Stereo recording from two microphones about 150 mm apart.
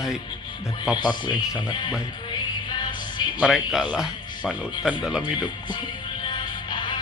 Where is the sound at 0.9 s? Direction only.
30° left (ahead or behind).